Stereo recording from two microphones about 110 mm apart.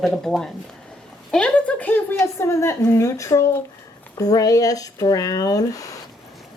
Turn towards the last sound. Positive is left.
turn(degrees=30)  # may be behind; listen again after turning